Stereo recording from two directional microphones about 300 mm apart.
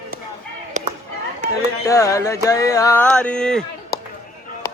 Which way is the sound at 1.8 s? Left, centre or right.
Centre.